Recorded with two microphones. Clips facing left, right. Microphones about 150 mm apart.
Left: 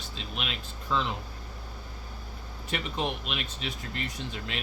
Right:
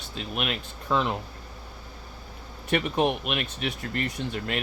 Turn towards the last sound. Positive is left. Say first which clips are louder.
# right 6 dB
turn(degrees=-55)  # may be behind; listen again after turning